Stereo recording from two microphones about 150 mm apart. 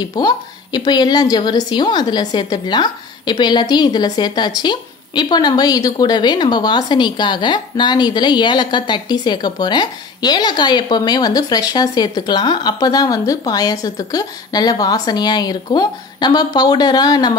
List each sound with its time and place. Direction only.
0.0 s a woman's voice: 30° left (ahead or behind)